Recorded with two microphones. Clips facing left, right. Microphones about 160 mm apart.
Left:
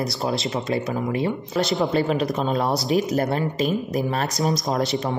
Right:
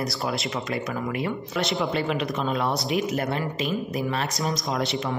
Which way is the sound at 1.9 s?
40° left (ahead or behind).